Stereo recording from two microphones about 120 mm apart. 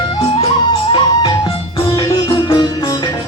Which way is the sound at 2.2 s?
45° left (ahead or behind).